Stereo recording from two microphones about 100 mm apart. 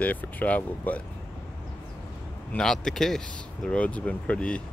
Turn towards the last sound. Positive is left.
turn(degrees=10)  # may be behind; listen again after turning